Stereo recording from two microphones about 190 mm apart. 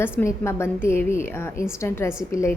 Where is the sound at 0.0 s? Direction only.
10° left (ahead or behind).